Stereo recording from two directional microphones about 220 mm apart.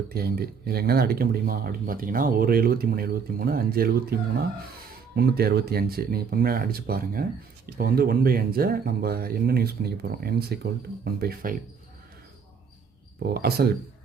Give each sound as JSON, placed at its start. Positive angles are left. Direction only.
{"t": 0.1, "sound": "speech", "side_deg": -45}
{"t": 13.2, "sound": "speech", "side_deg": -45}